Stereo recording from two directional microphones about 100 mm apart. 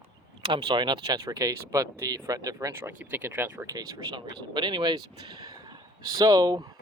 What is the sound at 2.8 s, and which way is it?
Speech, 20° right (ahead or behind).